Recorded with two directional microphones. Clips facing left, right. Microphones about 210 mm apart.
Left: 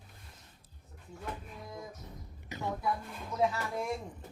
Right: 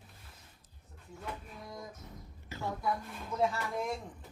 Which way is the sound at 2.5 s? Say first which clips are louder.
Left 1 dB; 20° left (ahead or behind).